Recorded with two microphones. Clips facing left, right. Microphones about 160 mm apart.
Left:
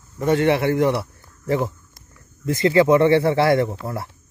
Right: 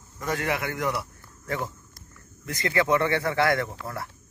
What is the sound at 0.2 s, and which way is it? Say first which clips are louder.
Speech: left 10 dB; 25° left (ahead or behind).